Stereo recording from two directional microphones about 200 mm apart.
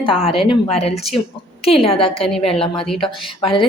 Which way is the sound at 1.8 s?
30° left (ahead or behind).